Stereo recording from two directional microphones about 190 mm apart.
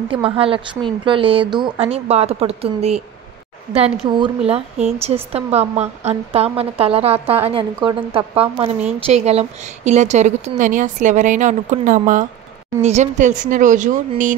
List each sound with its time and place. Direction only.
0.1 s a woman's voice: 30° right (ahead or behind)